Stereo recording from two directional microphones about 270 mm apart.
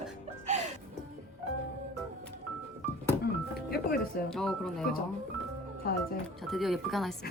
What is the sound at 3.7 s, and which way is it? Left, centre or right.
Music, left.